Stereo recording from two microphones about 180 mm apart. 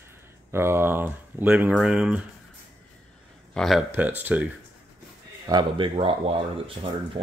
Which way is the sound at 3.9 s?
10° right (ahead or behind).